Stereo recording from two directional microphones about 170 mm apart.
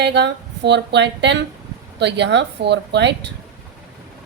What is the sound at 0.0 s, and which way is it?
A woman's voice, 80° right.